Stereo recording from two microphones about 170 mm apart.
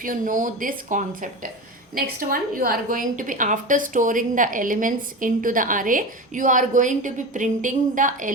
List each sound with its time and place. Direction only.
0.0 s a woman's voice: 55° right (ahead or behind)